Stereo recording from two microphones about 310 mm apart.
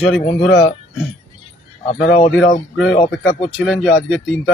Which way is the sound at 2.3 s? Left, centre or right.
Centre.